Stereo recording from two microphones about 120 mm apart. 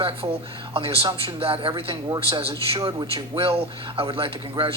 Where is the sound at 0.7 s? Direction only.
50° right (ahead or behind).